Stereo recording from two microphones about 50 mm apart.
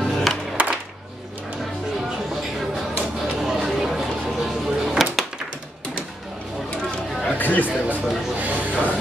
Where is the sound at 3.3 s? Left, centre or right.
Centre.